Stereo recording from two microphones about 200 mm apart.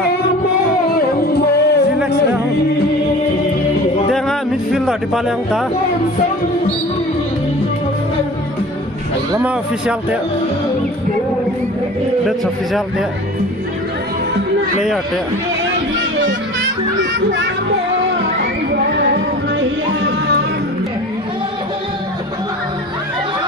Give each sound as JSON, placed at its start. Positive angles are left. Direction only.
{"t": 1.3, "sound": "music", "side_deg": 55}
{"t": 4.1, "sound": "music", "side_deg": 0}
{"t": 9.3, "sound": "speech", "side_deg": -5}